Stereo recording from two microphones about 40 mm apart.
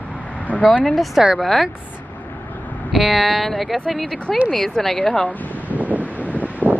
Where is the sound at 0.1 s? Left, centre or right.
Left.